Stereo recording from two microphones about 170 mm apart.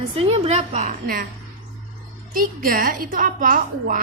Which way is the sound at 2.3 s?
55° right (ahead or behind).